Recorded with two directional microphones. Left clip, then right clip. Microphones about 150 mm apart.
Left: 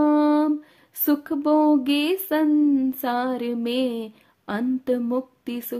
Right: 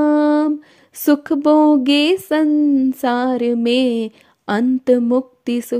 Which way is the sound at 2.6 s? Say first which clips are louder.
Right 5 dB; 30° right (ahead or behind).